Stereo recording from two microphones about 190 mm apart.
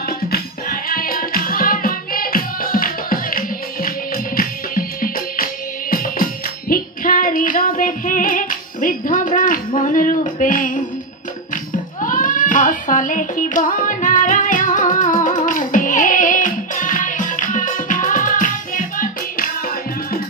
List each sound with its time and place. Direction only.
0.3 s music: 50° left (ahead or behind)
9.8 s a sound: 45° left (ahead or behind)
12.0 s child singing: 45° left (ahead or behind)